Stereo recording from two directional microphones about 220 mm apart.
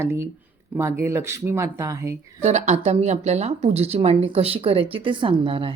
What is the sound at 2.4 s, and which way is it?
A woman's voice, 30° right (ahead or behind).